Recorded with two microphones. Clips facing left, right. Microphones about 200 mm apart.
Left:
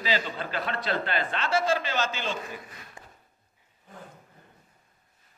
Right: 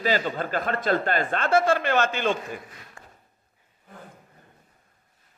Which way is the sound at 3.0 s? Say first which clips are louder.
Even; 20° left (ahead or behind).